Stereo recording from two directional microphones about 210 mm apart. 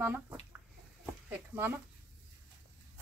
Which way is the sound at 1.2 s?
10° right (ahead or behind).